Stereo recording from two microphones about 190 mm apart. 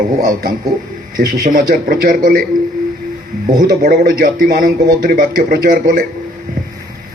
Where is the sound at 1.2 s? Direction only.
50° right (ahead or behind).